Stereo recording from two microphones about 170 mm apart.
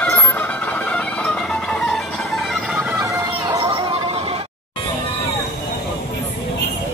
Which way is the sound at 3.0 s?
20° right (ahead or behind).